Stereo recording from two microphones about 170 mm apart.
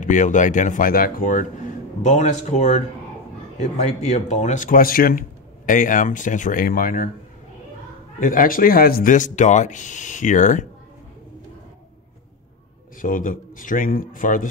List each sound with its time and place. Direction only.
0.0 s speech: 50° left (ahead or behind)
8.2 s speech: 55° left (ahead or behind)
13.0 s speech: 55° left (ahead or behind)